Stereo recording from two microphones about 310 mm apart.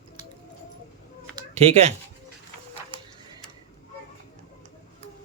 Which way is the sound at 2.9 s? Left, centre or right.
Centre.